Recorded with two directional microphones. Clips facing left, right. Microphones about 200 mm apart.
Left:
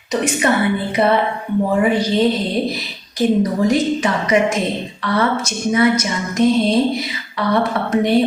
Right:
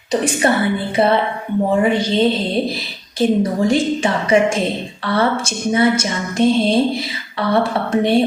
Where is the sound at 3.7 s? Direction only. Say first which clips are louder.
Even; 30° right (ahead or behind).